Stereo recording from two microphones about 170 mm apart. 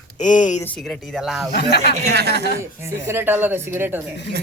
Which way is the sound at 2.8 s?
15° right (ahead or behind).